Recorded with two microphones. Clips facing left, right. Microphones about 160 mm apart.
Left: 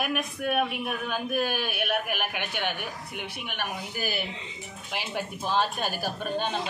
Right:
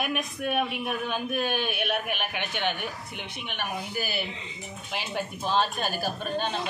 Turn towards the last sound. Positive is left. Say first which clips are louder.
# even
turn(degrees=15)  # may be behind; listen again after turning